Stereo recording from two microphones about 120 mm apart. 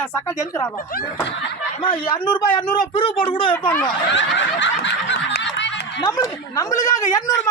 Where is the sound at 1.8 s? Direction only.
45° left (ahead or behind).